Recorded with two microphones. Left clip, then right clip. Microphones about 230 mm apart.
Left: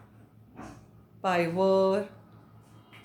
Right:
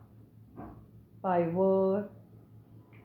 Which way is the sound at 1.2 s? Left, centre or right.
Left.